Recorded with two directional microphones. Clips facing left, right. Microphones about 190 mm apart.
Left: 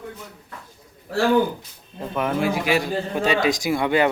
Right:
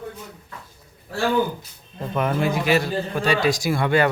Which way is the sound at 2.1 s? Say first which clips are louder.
Even; 5° left (ahead or behind).